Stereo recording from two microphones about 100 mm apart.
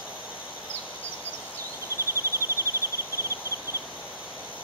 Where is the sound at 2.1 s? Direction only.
30° right (ahead or behind).